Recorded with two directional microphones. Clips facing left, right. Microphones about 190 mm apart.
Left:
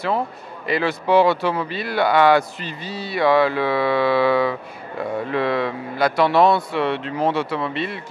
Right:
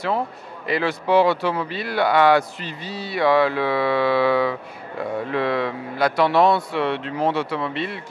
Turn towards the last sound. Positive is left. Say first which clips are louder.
# left 1 dB
turn(degrees=10)  # may be behind; listen again after turning